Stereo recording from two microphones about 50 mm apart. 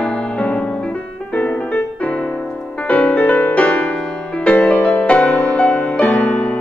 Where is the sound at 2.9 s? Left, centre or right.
Left.